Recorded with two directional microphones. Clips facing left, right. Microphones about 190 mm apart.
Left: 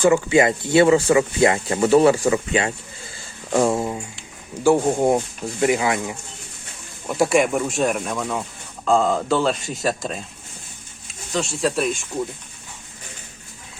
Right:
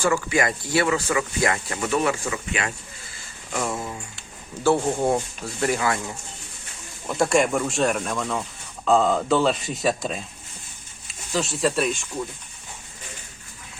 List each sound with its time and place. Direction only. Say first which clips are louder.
0.0 s speech: left 6 dB; 25° left (ahead or behind)
4.6 s speech: left 4 dB; 15° left (ahead or behind)
7.1 s speech: left 2 dB; 5° left (ahead or behind)
11.3 s speech: left 1 dB; centre (ahead or behind)